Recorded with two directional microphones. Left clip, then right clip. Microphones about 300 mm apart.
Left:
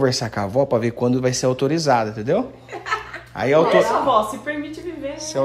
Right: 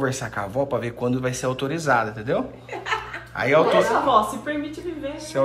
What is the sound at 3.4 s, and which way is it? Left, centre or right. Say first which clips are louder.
A woman's voice: left 2 dB; left.